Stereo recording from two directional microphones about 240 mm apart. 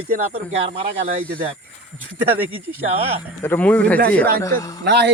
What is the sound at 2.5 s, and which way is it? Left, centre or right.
Speech, right.